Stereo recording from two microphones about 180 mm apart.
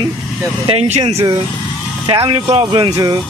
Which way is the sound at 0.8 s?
35° right (ahead or behind).